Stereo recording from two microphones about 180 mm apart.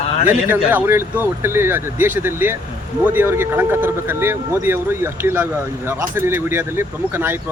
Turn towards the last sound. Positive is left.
turn(degrees=-10)  # may be behind; listen again after turning